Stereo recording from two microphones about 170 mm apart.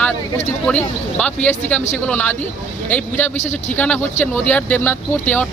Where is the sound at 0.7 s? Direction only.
10° left (ahead or behind).